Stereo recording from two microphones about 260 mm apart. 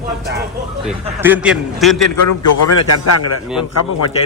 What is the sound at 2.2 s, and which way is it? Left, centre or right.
A man's voice, left.